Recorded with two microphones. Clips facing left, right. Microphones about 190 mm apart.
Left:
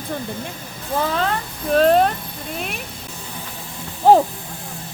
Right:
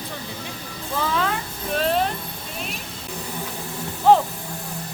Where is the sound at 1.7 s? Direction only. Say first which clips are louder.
Left 8 dB; 45° left (ahead or behind).